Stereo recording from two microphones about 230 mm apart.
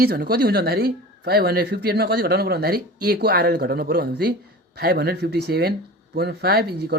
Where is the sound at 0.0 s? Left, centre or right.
Right.